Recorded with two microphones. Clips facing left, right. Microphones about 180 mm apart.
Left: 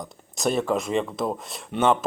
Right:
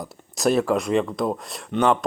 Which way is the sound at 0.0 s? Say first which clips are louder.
Right 4 dB; centre (ahead or behind).